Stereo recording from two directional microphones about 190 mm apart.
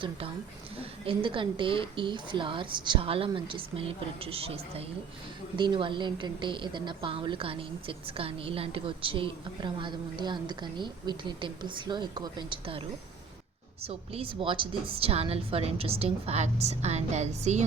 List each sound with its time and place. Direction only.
0.8 s a woman's voice: 30° right (ahead or behind)